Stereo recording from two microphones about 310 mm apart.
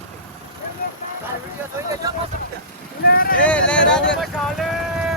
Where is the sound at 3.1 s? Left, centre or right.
Left.